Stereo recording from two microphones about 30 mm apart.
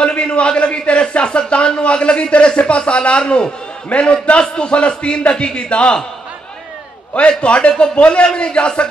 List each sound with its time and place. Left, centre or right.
0.0 s a man's voice: left
7.2 s a man's voice: left